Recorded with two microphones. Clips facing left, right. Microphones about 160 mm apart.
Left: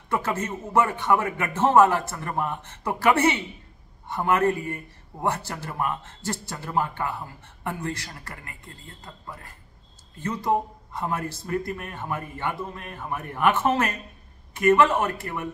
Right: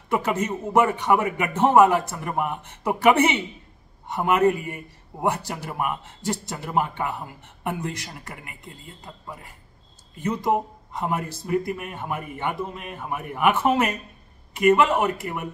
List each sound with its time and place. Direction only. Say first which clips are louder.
0.1 s a man's voice: right 3 dB; 15° right (ahead or behind)